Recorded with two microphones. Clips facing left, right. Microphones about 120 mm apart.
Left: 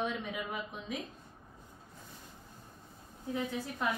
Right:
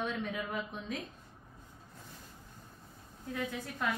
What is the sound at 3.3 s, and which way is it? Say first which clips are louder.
Speech: left 2 dB; 20° left (ahead or behind).